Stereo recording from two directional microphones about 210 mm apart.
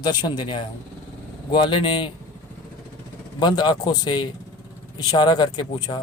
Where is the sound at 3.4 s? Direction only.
20° left (ahead or behind).